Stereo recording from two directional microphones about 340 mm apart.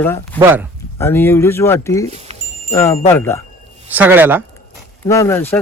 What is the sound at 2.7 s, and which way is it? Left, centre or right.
Speech, centre.